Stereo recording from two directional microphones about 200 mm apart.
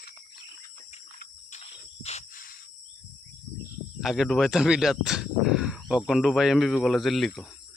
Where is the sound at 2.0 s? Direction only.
40° left (ahead or behind).